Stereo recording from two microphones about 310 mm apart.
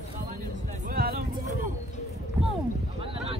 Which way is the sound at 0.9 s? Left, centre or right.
Right.